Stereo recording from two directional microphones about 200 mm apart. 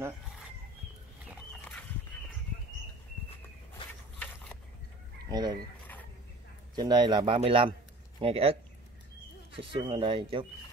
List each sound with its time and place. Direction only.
1.5 s dog: centre (ahead or behind)
5.3 s speech: 20° right (ahead or behind)
6.7 s speech: 20° right (ahead or behind)